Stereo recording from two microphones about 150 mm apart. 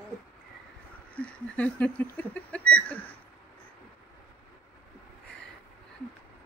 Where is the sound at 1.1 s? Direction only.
10° left (ahead or behind).